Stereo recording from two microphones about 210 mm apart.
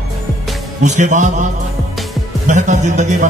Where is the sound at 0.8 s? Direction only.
35° right (ahead or behind).